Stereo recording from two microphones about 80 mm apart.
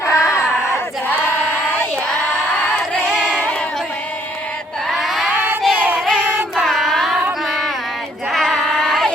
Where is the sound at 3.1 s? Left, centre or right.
Centre.